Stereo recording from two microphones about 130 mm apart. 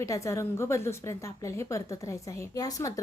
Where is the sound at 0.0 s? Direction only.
25° left (ahead or behind).